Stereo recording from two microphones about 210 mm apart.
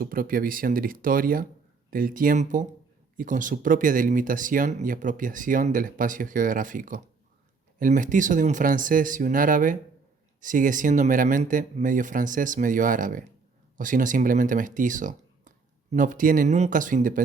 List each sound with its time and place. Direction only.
0.0 s speech: 45° right (ahead or behind)